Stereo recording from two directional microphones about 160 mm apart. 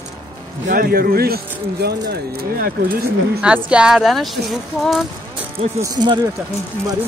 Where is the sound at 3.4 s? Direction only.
5° right (ahead or behind).